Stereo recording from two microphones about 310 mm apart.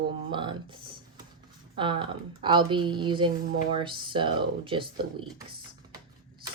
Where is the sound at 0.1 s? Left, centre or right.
Centre.